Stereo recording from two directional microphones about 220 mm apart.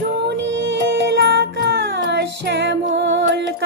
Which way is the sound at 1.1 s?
55° right (ahead or behind).